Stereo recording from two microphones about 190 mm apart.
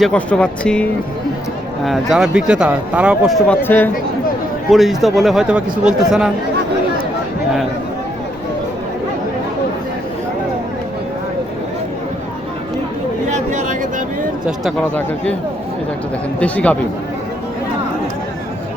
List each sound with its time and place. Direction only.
0.0 s speech: 5° left (ahead or behind)
1.8 s speech: centre (ahead or behind)
13.3 s a sound: 40° right (ahead or behind)
14.4 s speech: centre (ahead or behind)
16.4 s speech: 5° left (ahead or behind)